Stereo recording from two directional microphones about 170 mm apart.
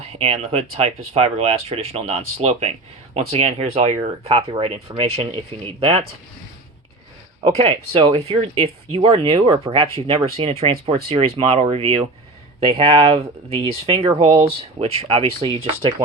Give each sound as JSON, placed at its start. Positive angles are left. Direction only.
{"t": 0.1, "sound": "speech", "side_deg": -35}
{"t": 7.5, "sound": "speech", "side_deg": -35}